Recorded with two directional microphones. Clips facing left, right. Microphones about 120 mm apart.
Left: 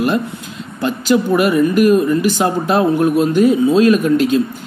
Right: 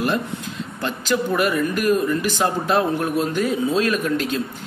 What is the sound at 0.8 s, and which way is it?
Speech, 15° left (ahead or behind).